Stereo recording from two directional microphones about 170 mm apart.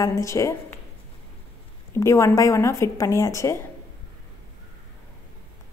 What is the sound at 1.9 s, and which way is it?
A woman's voice, 15° left (ahead or behind).